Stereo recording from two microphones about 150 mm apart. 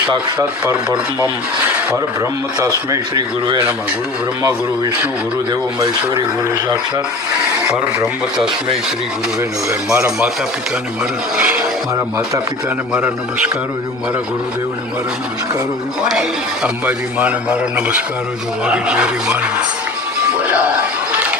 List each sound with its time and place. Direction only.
2.6 s speech: 20° right (ahead or behind)
5.5 s speech: 25° right (ahead or behind)
9.9 s a man's voice: 10° right (ahead or behind)
11.3 s a man's voice: 5° right (ahead or behind)
12.9 s a man's voice: 10° right (ahead or behind)
16.6 s a man's voice: 10° right (ahead or behind)